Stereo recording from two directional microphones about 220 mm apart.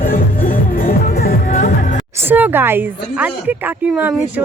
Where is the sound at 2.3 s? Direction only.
10° right (ahead or behind).